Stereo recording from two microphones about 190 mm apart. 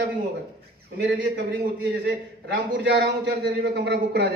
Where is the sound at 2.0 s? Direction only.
65° right (ahead or behind).